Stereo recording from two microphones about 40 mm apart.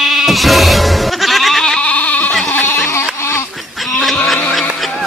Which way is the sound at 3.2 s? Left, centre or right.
Left.